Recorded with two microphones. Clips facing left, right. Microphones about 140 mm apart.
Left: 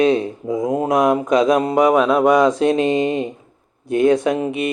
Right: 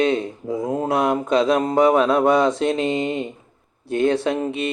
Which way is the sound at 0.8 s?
30° right (ahead or behind).